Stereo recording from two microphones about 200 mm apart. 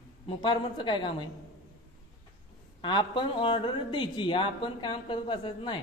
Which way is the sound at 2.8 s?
25° left (ahead or behind).